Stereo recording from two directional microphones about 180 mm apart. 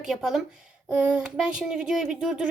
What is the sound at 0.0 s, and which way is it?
Speech, 5° right (ahead or behind).